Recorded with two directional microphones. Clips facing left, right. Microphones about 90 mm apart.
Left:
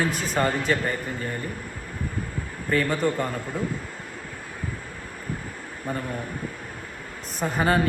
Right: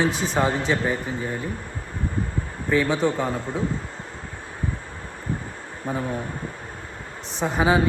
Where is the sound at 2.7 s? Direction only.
Centre (ahead or behind).